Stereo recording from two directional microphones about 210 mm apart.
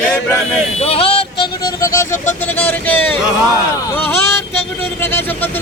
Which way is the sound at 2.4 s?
10° left (ahead or behind).